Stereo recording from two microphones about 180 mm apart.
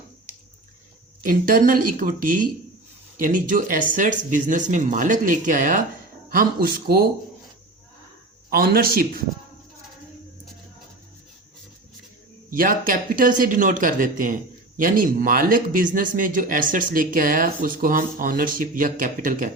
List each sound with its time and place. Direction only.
1.2 s speech: 50° right (ahead or behind)
8.4 s a man's voice: 55° right (ahead or behind)
12.5 s speech: 50° right (ahead or behind)